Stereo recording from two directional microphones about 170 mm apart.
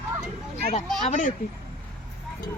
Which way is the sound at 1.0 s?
45° left (ahead or behind).